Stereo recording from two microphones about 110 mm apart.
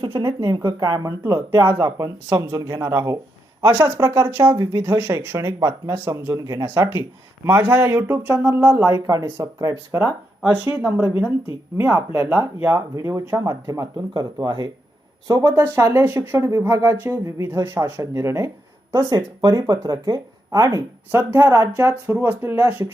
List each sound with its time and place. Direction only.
0.4 s speech: 35° right (ahead or behind)
1.2 s speech: 20° right (ahead or behind)
15.5 s speech: 20° right (ahead or behind)
19.0 s speech: 40° right (ahead or behind)
21.1 s speech: 20° right (ahead or behind)